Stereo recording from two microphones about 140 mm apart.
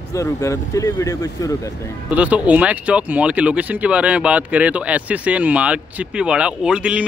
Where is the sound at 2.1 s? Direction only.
10° right (ahead or behind).